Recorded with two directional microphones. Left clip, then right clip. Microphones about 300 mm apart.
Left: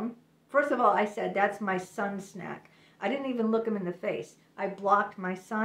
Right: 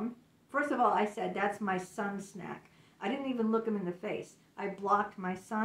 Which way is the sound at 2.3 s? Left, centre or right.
Centre.